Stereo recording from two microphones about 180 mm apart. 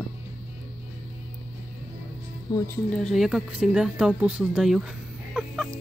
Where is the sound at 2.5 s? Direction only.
25° left (ahead or behind).